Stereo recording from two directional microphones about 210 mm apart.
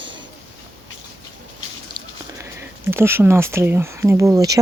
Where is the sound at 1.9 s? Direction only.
20° right (ahead or behind).